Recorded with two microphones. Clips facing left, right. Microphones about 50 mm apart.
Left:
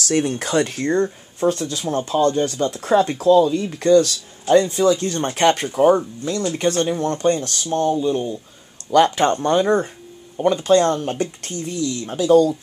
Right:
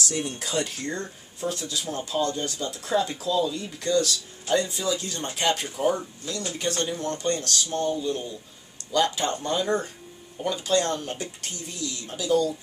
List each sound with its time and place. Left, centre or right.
0.0 s speech: left
5.7 s speech: left
8.9 s speech: left